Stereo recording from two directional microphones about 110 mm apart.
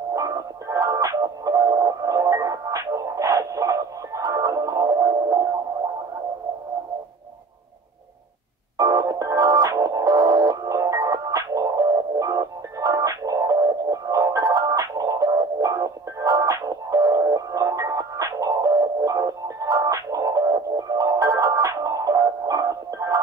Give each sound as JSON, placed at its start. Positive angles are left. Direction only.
{"t": 0.1, "sound": "music", "side_deg": -30}
{"t": 8.7, "sound": "music", "side_deg": -35}